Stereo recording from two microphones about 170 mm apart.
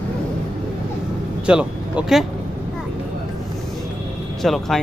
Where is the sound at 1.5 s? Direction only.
5° right (ahead or behind).